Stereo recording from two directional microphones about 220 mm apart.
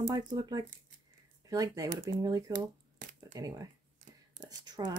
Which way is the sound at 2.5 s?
35° right (ahead or behind).